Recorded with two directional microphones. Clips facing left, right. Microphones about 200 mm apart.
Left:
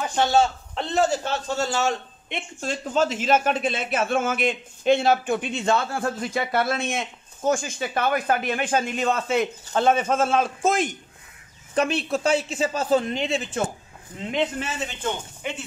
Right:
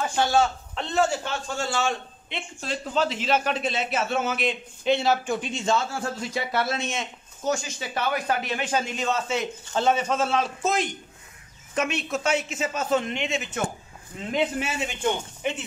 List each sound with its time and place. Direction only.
0.2 s a man's voice: 25° left (ahead or behind); by 11.0 s 50° left (ahead or behind)
11.7 s speech: 35° left (ahead or behind)
14.3 s speech: 10° right (ahead or behind)